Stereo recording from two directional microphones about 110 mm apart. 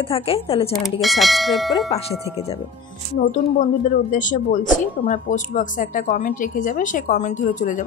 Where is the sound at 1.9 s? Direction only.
65° left (ahead or behind).